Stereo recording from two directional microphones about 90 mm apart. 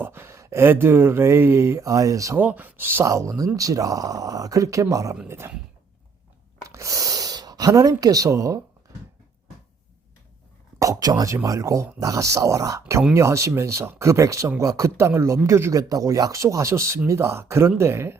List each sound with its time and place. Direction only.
0.0 s speech: 25° right (ahead or behind)
2.4 s speech: 20° right (ahead or behind)
6.7 s speech: 35° right (ahead or behind)
10.8 s speech: 40° right (ahead or behind)